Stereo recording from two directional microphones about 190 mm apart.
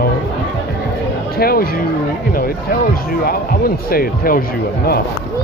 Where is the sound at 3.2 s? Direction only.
50° left (ahead or behind).